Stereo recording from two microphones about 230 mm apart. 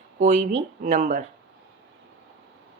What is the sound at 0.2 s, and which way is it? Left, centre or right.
A woman's voice, right.